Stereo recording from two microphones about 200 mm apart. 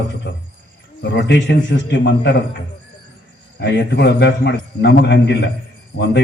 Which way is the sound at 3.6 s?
60° left (ahead or behind).